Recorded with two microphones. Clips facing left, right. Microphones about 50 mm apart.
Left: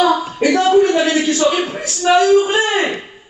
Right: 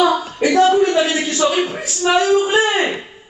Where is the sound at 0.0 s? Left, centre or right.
Right.